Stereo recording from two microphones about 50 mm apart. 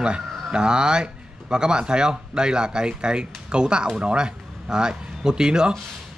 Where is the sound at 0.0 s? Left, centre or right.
Centre.